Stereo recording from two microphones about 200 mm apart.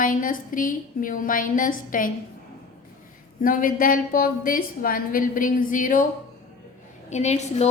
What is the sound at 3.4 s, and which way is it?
A woman's voice, 45° left (ahead or behind).